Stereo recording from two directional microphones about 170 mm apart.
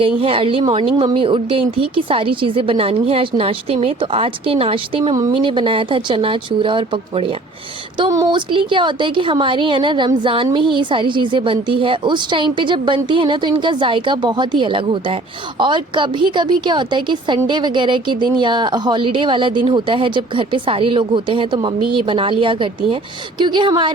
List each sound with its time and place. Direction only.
0.0 s a woman's voice: 30° right (ahead or behind)